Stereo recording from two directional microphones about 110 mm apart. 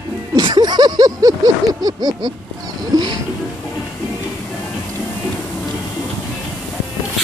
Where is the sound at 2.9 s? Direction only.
35° right (ahead or behind).